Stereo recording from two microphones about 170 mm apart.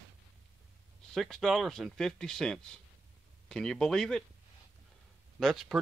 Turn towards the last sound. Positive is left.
turn(degrees=0)  # may be behind; listen again after turning